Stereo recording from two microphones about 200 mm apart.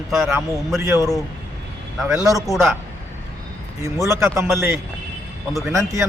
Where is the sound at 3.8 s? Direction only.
15° right (ahead or behind).